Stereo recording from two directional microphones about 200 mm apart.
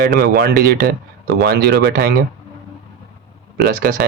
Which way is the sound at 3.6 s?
50° right (ahead or behind).